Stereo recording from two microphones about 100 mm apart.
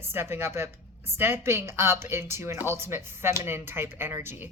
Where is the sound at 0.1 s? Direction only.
25° right (ahead or behind).